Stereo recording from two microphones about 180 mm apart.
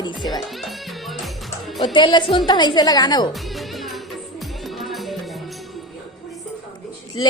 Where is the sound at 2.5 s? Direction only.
25° left (ahead or behind).